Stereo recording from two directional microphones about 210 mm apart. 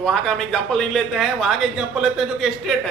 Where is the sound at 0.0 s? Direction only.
5° left (ahead or behind).